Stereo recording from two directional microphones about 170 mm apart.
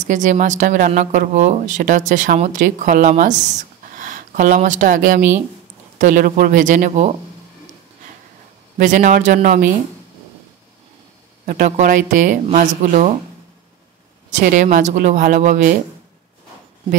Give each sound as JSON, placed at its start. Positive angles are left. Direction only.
{"t": 0.0, "sound": "speech", "side_deg": -45}
{"t": 8.7, "sound": "speech", "side_deg": -50}
{"t": 11.4, "sound": "speech", "side_deg": -55}
{"t": 14.4, "sound": "speech", "side_deg": -50}